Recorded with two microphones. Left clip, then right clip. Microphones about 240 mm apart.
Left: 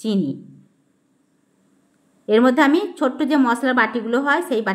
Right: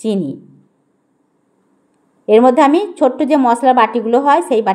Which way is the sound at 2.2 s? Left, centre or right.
Centre.